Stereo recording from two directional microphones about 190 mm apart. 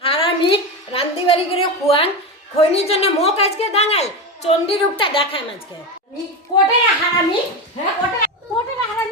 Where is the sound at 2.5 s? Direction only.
30° left (ahead or behind).